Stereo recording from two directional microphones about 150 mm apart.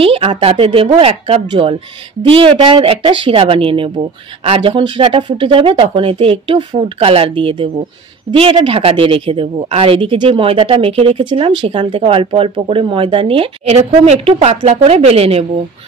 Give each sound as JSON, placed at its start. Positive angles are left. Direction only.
{"t": 0.0, "sound": "speech", "side_deg": -40}